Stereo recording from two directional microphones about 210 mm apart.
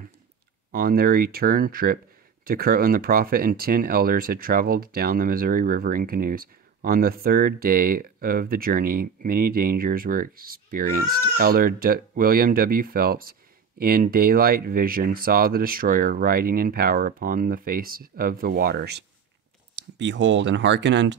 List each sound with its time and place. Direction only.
0.7 s speech: 45° right (ahead or behind)
19.7 s speech: 60° right (ahead or behind)